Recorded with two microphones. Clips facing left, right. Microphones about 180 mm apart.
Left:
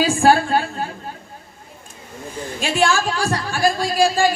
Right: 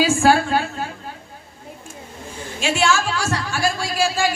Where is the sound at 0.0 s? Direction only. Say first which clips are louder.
Left 1 dB; 35° left (ahead or behind).